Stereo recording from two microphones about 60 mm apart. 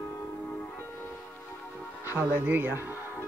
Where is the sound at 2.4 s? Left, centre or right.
Right.